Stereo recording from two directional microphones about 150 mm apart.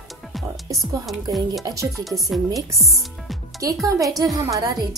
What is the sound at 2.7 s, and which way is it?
Speech, 20° right (ahead or behind).